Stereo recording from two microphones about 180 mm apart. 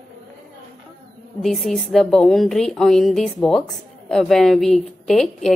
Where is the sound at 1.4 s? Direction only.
Centre (ahead or behind).